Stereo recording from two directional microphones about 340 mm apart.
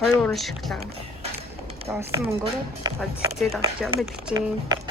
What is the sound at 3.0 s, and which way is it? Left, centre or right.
Speech, centre.